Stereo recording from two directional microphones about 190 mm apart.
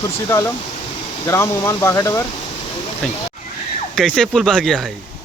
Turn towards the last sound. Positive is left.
turn(degrees=5)  # may be behind; listen again after turning